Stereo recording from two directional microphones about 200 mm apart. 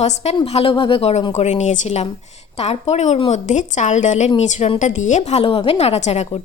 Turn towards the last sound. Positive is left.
turn(degrees=35)  # may be behind; listen again after turning